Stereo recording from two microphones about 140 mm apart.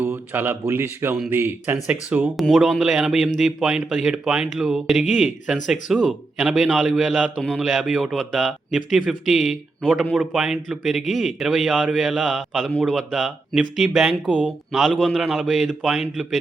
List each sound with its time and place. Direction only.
0.0 s speech: 15° right (ahead or behind)
1.1 s a man's voice: 5° right (ahead or behind)
2.3 s a man's voice: centre (ahead or behind)